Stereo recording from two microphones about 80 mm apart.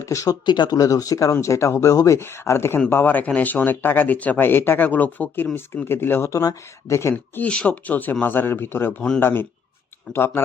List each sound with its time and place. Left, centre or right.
0.0 s speech: left
0.4 s speech: left
0.8 s speech: left
6.4 s speech: left
7.4 s speech: centre
9.0 s speech: centre
9.2 s speech: left